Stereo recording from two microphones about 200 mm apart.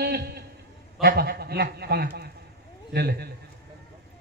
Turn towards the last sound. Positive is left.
turn(degrees=-55)  # may be behind; listen again after turning